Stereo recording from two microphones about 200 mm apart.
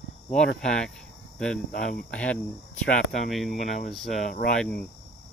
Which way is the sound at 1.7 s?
45° left (ahead or behind).